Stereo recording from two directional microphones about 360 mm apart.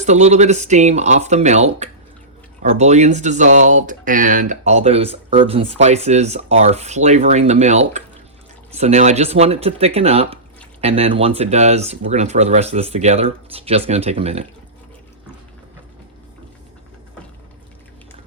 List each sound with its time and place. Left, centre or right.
0.0 s speech: centre